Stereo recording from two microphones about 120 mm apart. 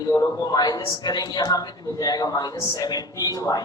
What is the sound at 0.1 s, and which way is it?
A woman's voice, 30° left (ahead or behind).